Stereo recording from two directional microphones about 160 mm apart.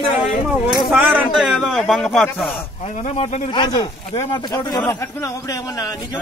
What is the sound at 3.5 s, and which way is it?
Speech, 25° left (ahead or behind).